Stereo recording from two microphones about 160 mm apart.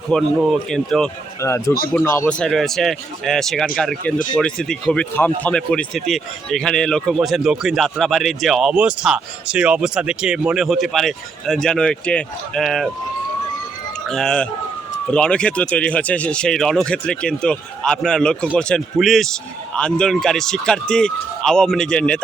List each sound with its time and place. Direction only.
0.1 s speech: centre (ahead or behind)
1.4 s speech: 15° left (ahead or behind)
2.4 s speech: centre (ahead or behind)
14.1 s speech: 5° left (ahead or behind)